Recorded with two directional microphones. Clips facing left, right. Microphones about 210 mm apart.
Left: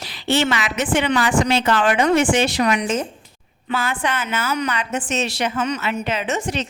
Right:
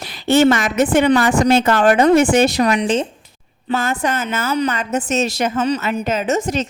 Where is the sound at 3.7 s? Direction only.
40° right (ahead or behind).